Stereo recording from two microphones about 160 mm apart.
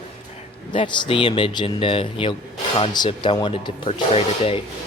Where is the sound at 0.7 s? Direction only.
30° left (ahead or behind).